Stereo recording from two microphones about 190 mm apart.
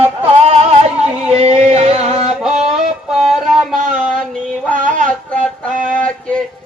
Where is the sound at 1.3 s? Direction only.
35° right (ahead or behind).